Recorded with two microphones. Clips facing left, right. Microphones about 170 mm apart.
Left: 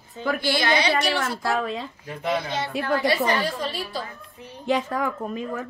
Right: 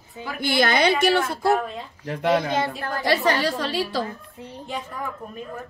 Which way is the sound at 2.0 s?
80° right.